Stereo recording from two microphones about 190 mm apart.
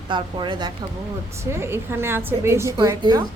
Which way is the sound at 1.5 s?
15° right (ahead or behind).